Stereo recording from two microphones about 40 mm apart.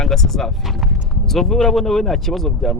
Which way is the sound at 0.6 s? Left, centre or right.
Centre.